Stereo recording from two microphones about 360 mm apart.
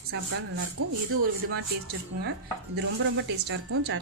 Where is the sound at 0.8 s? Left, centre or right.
Right.